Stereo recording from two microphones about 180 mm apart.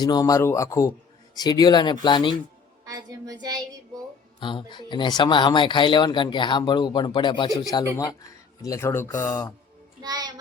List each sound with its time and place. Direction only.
0.0 s speech: 20° left (ahead or behind)
2.8 s a woman's voice: 20° right (ahead or behind)
4.4 s speech: 25° left (ahead or behind)
10.0 s a woman's voice: 20° right (ahead or behind)